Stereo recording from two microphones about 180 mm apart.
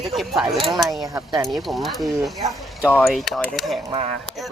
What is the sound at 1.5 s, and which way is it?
Speech, centre (ahead or behind).